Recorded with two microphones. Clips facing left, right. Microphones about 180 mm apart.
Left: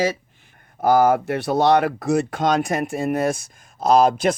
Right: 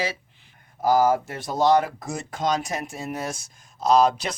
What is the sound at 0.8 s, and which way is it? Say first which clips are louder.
Speech: left 3 dB; 60° left (ahead or behind).